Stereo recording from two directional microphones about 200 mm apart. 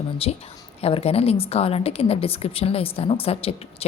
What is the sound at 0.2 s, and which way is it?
A woman's voice, 30° left (ahead or behind).